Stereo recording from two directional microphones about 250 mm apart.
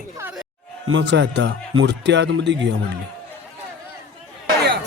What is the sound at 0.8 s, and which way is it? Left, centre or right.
Speech, right.